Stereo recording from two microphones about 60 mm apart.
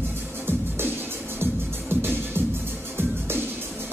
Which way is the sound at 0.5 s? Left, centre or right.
Right.